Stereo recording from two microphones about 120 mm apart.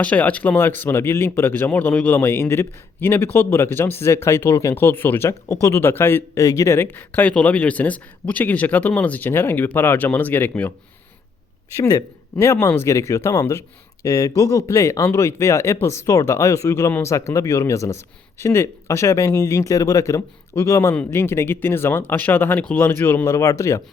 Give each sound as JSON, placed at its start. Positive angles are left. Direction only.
{"t": 0.0, "sound": "speech", "side_deg": 10}
{"t": 11.8, "sound": "speech", "side_deg": 25}